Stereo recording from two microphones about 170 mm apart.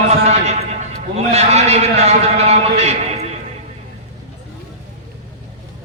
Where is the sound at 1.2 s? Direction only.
40° right (ahead or behind).